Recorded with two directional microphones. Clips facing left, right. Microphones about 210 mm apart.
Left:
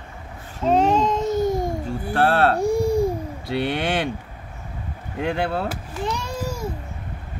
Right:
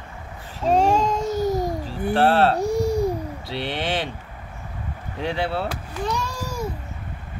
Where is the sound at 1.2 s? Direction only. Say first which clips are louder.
Left 1 dB; 25° left (ahead or behind).